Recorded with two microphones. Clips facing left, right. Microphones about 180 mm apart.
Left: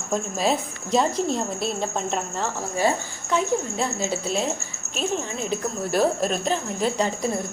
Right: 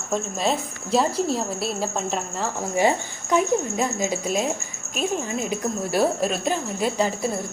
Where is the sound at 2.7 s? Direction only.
15° right (ahead or behind).